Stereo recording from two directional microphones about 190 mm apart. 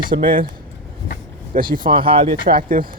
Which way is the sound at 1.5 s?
45° right (ahead or behind).